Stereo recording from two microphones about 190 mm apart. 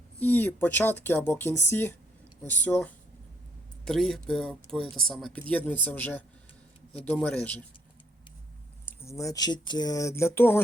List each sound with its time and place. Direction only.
0.2 s speech: 10° left (ahead or behind)
8.9 s speech: 15° left (ahead or behind)